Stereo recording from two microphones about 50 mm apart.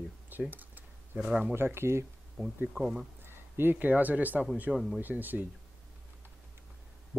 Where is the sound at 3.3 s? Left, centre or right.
Right.